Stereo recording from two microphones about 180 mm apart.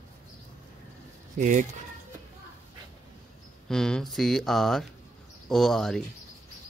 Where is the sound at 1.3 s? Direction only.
45° right (ahead or behind).